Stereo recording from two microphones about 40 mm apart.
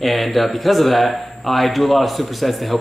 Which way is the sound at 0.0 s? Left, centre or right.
Centre.